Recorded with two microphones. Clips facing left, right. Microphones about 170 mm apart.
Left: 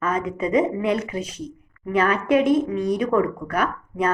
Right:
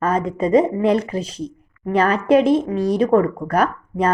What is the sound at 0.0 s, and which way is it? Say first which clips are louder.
Speech: right 4 dB; 35° right (ahead or behind).